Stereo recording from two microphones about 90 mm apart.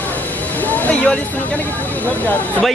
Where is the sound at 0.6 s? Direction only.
20° left (ahead or behind).